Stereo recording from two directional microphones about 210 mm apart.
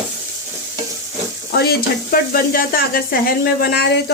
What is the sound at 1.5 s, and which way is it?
Sizzle, 45° left (ahead or behind).